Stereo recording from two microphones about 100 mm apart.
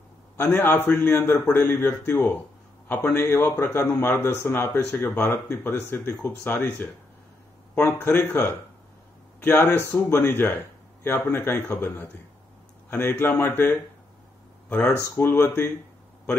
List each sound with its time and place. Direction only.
0.4 s a man's voice: 20° left (ahead or behind)